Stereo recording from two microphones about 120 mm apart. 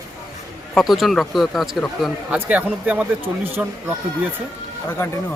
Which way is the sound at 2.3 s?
15° right (ahead or behind).